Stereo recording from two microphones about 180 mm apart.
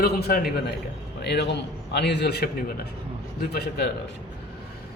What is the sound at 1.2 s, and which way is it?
A man's voice, 70° left (ahead or behind).